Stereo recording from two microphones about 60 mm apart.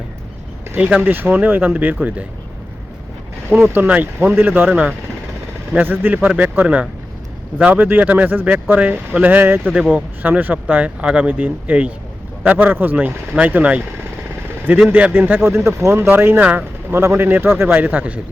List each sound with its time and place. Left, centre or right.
0.8 s speech: right
3.5 s speech: right
4.7 s speech: right
5.7 s speech: right
14.8 s speech: right
15.2 s speech: right
16.0 s speech: right
16.9 s speech: right